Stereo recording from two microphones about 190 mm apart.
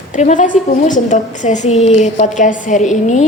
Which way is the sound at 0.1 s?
40° left (ahead or behind).